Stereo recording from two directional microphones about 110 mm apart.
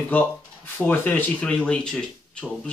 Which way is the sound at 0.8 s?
15° left (ahead or behind).